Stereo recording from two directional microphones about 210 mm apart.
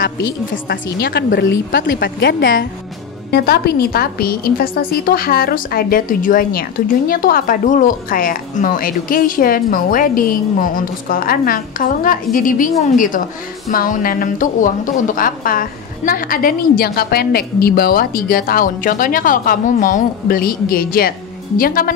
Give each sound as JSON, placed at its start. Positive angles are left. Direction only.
{"t": 0.9, "sound": "a woman's voice", "side_deg": 50}